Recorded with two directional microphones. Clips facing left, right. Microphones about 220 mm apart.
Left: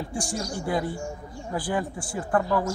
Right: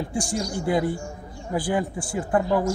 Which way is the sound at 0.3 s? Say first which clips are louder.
Right 4 dB; 20° right (ahead or behind).